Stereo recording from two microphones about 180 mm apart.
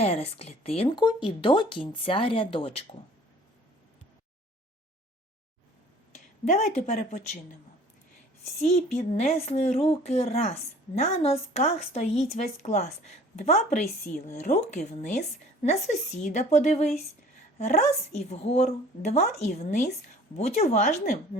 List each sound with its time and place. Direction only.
0.0 s speech: 35° left (ahead or behind)
6.4 s speech: 40° left (ahead or behind)
8.5 s speech: 35° left (ahead or behind)